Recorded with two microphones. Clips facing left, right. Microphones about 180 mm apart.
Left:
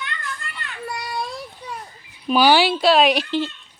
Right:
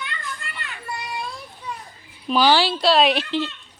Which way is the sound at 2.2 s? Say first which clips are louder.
Left 2 dB; 10° left (ahead or behind).